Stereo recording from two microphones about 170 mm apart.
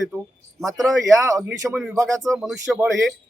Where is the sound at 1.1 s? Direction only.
20° right (ahead or behind).